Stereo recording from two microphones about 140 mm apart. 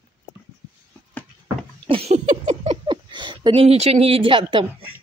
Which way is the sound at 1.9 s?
45° right (ahead or behind).